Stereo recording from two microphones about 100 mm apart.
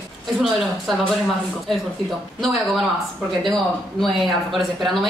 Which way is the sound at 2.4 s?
Centre (ahead or behind).